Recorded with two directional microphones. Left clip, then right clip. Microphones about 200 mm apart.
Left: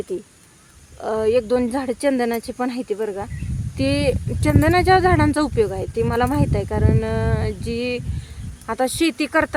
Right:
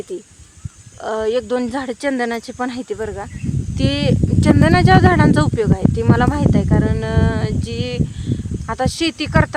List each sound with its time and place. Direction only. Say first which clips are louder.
0.1 s speech: left 1 dB; 5° left (ahead or behind)